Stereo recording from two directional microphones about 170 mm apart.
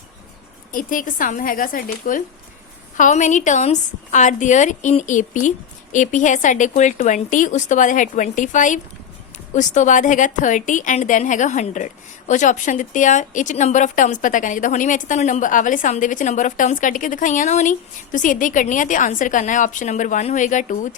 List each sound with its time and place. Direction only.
0.7 s a woman's voice: 55° left (ahead or behind)